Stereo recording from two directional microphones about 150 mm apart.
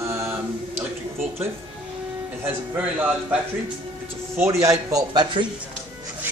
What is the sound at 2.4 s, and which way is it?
Speech, 10° right (ahead or behind).